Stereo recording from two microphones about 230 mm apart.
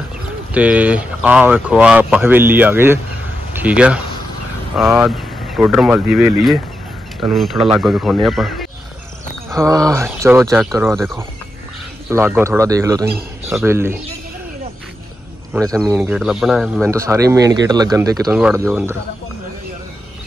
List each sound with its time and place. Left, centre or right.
0.6 s speech: centre
9.5 s speech: centre
10.7 s speech: centre
12.1 s speech: centre
15.6 s speech: centre